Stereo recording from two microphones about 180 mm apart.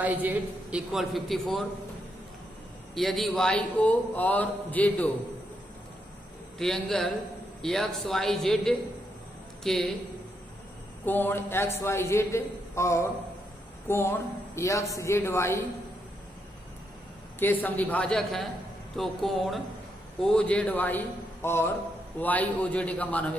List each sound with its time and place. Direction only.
0.0 s a man's voice: 10° right (ahead or behind)
2.9 s a man's voice: centre (ahead or behind)
6.6 s a man's voice: 5° left (ahead or behind)
11.1 s a man's voice: 10° left (ahead or behind)
17.4 s a man's voice: 10° left (ahead or behind)